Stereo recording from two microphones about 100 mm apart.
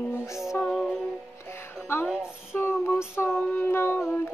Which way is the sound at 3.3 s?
15° left (ahead or behind).